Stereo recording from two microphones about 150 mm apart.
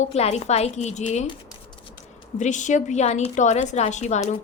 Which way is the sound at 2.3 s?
55° left (ahead or behind).